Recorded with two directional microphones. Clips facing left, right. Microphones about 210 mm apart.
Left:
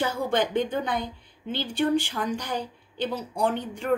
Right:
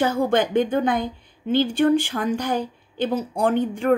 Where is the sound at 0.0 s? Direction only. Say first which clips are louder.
Right 5 dB; 50° right (ahead or behind).